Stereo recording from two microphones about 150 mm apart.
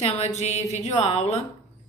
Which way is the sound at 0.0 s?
45° left (ahead or behind).